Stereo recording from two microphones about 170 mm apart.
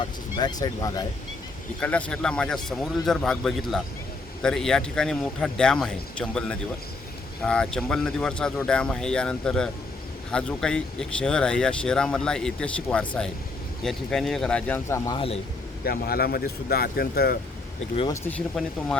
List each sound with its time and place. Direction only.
0.0 s speech: 25° left (ahead or behind)
1.8 s speech: 5° left (ahead or behind)
15.8 s speech: 65° left (ahead or behind)
18.1 s speech: 10° left (ahead or behind)